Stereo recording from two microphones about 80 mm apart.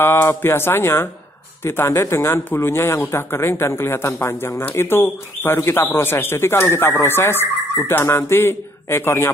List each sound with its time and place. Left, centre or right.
0.0 s speech: left